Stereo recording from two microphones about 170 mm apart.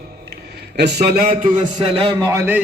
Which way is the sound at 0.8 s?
75° right (ahead or behind).